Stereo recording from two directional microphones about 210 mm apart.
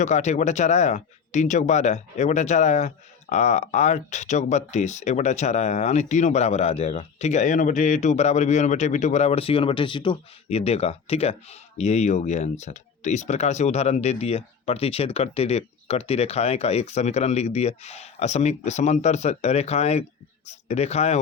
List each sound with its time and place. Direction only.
0.0 s speech: 35° left (ahead or behind)